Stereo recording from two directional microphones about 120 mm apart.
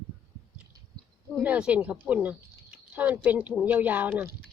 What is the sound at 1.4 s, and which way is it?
Speech, 10° right (ahead or behind).